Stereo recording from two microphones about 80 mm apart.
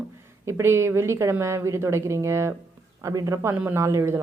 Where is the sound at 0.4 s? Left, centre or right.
Right.